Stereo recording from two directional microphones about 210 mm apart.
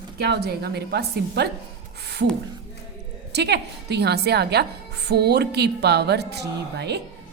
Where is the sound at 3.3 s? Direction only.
50° right (ahead or behind).